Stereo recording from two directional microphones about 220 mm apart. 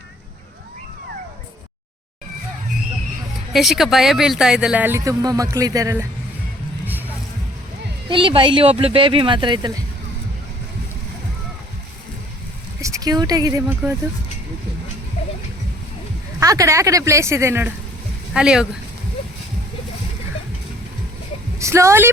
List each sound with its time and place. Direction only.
3.5 s speech: centre (ahead or behind)
8.1 s speech: 20° right (ahead or behind)
12.8 s speech: 15° right (ahead or behind)
16.4 s speech: 15° right (ahead or behind)
21.6 s speech: 15° right (ahead or behind)